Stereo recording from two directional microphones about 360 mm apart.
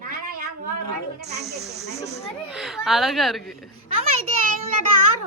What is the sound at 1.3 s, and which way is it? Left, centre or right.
Speech, centre.